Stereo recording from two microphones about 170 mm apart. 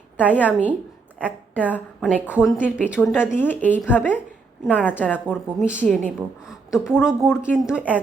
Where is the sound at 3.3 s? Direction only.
10° left (ahead or behind).